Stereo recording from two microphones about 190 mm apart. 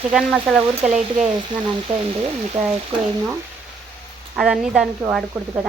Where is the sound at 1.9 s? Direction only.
30° right (ahead or behind).